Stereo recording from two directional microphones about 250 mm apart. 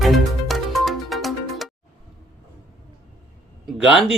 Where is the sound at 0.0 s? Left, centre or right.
Centre.